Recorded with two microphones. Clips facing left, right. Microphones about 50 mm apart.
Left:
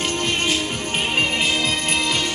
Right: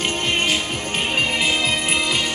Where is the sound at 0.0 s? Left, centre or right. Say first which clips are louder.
Right 1 dB; centre.